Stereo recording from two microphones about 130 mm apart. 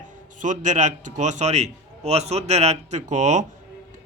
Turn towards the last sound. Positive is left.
turn(degrees=-65)  # may be behind; listen again after turning